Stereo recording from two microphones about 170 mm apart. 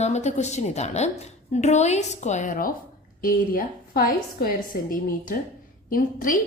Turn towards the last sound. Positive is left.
turn(degrees=55)  # may be behind; listen again after turning